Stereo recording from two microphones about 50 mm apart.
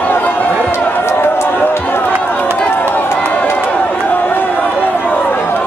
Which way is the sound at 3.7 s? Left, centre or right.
Left.